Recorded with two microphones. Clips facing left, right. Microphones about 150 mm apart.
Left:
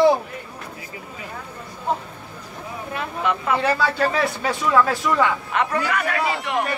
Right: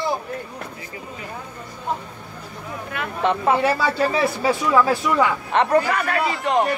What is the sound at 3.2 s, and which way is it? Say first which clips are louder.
Speech: right 3 dB; 30° right (ahead or behind).